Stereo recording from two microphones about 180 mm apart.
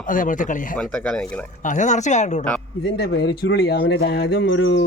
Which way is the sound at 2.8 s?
70° left (ahead or behind).